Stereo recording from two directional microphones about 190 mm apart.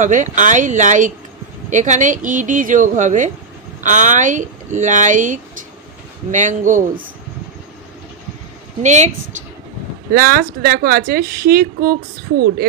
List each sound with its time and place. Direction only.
0.0 s speech: 40° right (ahead or behind)
8.8 s speech: 40° right (ahead or behind)
10.1 s speech: 50° right (ahead or behind)